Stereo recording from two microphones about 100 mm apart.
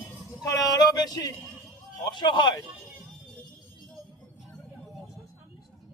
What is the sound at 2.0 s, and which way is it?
Speech, 50° left (ahead or behind).